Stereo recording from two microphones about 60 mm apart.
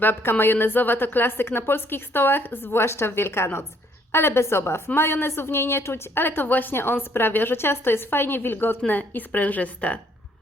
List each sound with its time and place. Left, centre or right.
0.0 s a woman's voice: left
2.8 s a woman's voice: left